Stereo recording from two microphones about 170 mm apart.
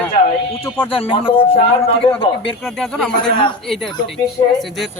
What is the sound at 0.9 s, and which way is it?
A man's voice, 30° left (ahead or behind).